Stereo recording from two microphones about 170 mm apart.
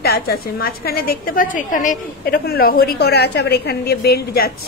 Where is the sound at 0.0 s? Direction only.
65° left (ahead or behind).